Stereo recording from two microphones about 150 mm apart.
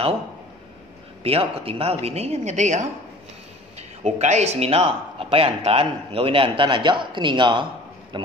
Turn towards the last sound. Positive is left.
turn(degrees=-30)  # may be behind; listen again after turning